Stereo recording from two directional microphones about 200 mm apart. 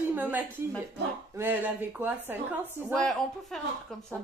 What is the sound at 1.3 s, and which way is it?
A woman's voice, 10° right (ahead or behind).